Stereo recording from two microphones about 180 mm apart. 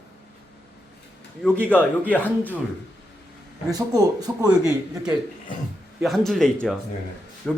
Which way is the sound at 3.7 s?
20° right (ahead or behind).